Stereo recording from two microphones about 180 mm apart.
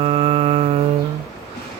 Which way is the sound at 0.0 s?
30° right (ahead or behind).